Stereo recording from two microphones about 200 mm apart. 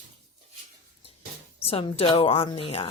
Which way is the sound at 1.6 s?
30° left (ahead or behind).